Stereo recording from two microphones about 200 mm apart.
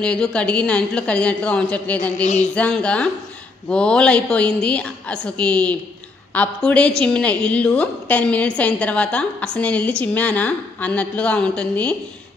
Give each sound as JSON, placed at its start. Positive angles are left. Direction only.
{"t": 0.0, "sound": "a woman's voice", "side_deg": 5}
{"t": 2.2, "sound": "speech", "side_deg": 35}
{"t": 2.5, "sound": "a woman's voice", "side_deg": 5}